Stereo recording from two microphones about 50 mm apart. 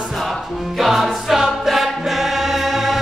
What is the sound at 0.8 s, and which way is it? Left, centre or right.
Music, centre.